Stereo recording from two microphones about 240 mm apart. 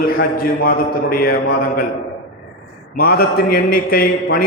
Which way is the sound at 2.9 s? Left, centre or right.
Left.